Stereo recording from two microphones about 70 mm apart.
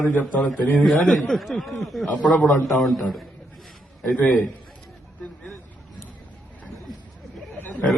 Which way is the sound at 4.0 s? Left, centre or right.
Centre.